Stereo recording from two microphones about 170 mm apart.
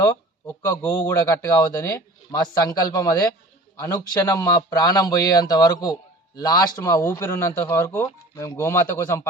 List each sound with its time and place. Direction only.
0.0 s a man's voice: 20° left (ahead or behind)